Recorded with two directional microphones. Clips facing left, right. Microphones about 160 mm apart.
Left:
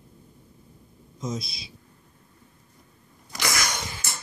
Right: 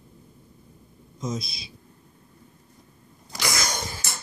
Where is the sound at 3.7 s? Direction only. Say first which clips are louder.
Right 2 dB; 35° right (ahead or behind).